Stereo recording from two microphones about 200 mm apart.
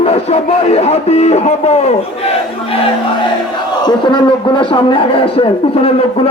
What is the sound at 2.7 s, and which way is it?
Crowd, 30° left (ahead or behind).